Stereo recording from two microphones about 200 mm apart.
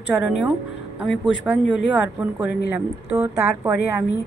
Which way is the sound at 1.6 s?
65° left (ahead or behind).